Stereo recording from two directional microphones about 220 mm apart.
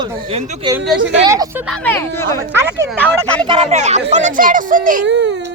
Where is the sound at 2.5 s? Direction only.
10° right (ahead or behind).